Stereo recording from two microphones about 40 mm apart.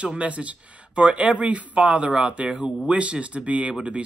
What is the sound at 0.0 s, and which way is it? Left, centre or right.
Speech, right.